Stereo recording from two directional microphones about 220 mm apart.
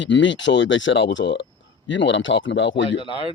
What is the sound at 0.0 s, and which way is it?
Speech, 55° left (ahead or behind).